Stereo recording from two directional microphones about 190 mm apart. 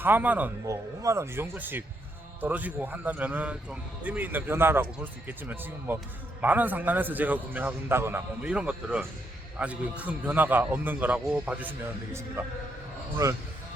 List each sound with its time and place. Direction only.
0.0 s a man's voice: 10° right (ahead or behind)
5.9 s a man's voice: 10° right (ahead or behind)
13.2 s a man's voice: 15° right (ahead or behind)